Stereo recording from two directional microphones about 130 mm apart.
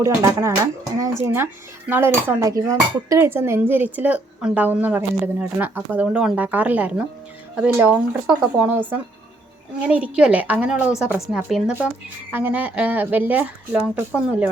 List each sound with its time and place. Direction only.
0.0 s speech: 25° right (ahead or behind)